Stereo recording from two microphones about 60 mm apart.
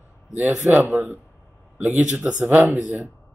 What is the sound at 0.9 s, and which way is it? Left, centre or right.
Speech, right.